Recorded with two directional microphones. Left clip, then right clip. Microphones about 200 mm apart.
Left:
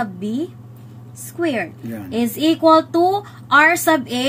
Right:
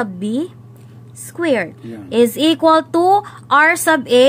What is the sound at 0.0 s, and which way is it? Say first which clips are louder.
A woman's voice: right 3 dB; 35° right (ahead or behind).